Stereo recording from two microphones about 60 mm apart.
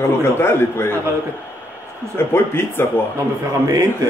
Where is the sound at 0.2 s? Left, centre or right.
Left.